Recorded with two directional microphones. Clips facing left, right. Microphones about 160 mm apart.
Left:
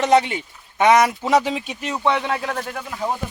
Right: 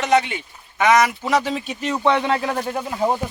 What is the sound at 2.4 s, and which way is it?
Speech, 15° right (ahead or behind).